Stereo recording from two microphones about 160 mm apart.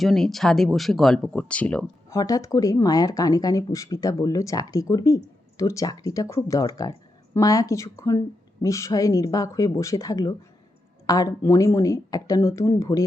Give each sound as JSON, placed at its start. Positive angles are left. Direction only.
{"t": 0.0, "sound": "speech", "side_deg": 0}
{"t": 2.0, "sound": "speech", "side_deg": 20}